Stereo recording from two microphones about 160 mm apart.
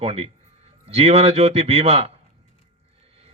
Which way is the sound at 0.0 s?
40° right (ahead or behind).